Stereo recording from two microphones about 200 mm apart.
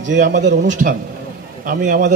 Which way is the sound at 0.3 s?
40° right (ahead or behind).